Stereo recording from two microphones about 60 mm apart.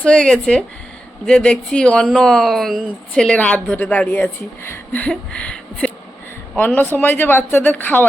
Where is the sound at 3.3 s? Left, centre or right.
Left.